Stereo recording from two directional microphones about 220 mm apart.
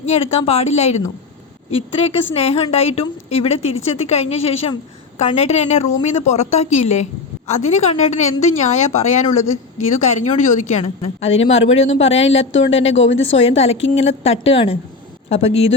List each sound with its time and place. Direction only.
0.0 s a woman's voice: 30° left (ahead or behind)
11.8 s a woman's voice: 60° left (ahead or behind)
12.0 s a woman's voice: 25° left (ahead or behind)
12.9 s a woman's voice: 60° left (ahead or behind)
13.4 s a woman's voice: 25° left (ahead or behind)